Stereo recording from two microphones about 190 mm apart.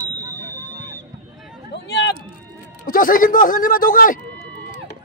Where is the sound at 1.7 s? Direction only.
65° left (ahead or behind).